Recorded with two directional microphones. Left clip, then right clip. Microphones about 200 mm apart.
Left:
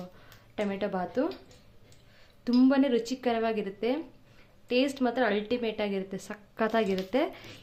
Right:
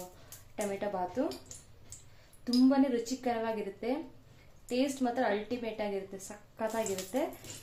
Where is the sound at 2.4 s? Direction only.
35° left (ahead or behind).